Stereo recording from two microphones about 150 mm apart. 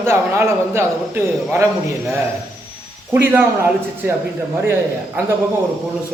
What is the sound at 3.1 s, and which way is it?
A man's voice, 15° right (ahead or behind).